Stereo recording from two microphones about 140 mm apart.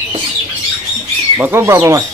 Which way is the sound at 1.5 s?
20° right (ahead or behind).